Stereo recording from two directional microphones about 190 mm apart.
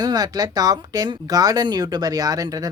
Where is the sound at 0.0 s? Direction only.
20° right (ahead or behind).